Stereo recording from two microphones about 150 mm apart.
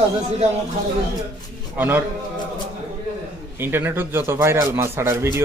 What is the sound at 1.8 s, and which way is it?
Speech, 15° right (ahead or behind).